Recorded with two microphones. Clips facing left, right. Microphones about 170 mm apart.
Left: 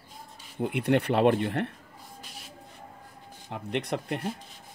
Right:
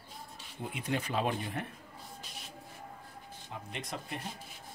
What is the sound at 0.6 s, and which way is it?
Speech, 65° left (ahead or behind).